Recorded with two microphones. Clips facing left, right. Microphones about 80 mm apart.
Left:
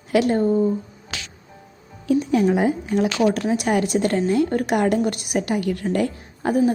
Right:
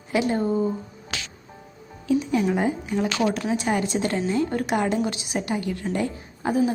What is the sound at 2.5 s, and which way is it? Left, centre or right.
Speech, centre.